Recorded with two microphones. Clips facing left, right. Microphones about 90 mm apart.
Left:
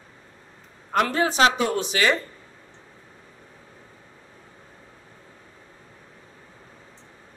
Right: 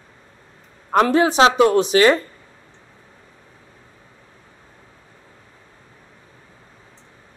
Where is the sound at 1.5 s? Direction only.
80° right.